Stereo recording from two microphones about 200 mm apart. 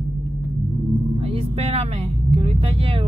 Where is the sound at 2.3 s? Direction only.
30° right (ahead or behind).